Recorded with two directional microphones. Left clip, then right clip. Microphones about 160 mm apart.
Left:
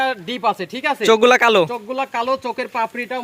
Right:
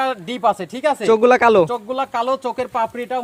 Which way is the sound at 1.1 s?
Centre (ahead or behind).